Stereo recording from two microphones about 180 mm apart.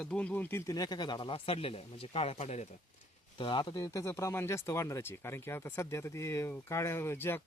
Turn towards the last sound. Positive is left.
turn(degrees=15)  # may be behind; listen again after turning